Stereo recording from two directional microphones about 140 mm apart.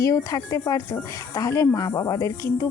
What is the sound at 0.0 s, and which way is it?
A woman's voice, 25° left (ahead or behind).